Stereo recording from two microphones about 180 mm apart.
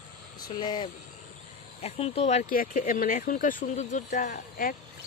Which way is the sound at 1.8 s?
35° left (ahead or behind).